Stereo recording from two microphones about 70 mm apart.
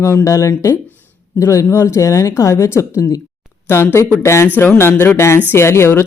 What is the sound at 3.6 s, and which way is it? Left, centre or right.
A woman's voice, left.